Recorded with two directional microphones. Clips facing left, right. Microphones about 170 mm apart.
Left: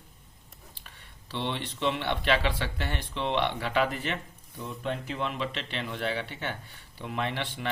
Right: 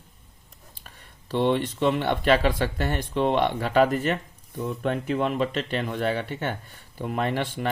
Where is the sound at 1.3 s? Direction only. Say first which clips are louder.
Right 10 dB; 45° right (ahead or behind).